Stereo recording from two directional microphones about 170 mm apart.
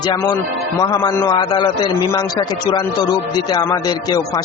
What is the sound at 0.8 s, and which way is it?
Speech, 20° left (ahead or behind).